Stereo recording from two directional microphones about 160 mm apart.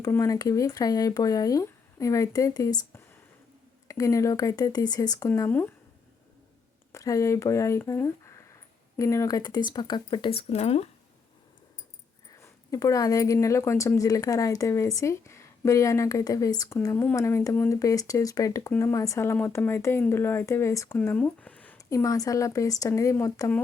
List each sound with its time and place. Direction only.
0.0 s speech: 20° left (ahead or behind)
5.3 s speech: 10° left (ahead or behind)
6.9 s speech: 20° left (ahead or behind); by 10.8 s 40° left (ahead or behind)
12.4 s speech: 20° left (ahead or behind)
21.8 s speech: 20° left (ahead or behind)